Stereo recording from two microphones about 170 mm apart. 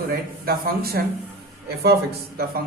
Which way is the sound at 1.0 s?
70° right (ahead or behind).